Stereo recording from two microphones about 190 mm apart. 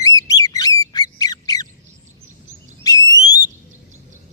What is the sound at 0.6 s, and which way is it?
Squawk, 20° left (ahead or behind).